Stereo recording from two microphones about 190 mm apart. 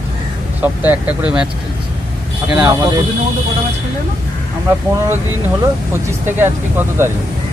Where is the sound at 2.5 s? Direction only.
20° right (ahead or behind).